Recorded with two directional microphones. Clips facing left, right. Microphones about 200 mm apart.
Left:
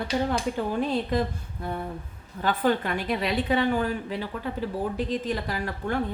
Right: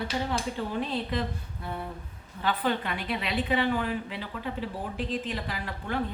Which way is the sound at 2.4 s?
45° left (ahead or behind).